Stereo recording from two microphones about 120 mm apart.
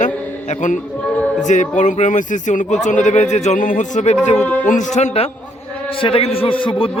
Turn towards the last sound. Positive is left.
turn(degrees=45)  # may be behind; listen again after turning